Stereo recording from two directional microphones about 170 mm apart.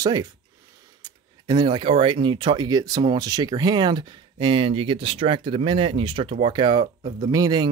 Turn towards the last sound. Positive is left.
turn(degrees=-25)  # may be behind; listen again after turning